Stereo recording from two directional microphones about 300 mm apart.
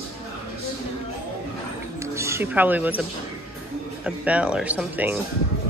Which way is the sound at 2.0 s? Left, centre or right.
Centre.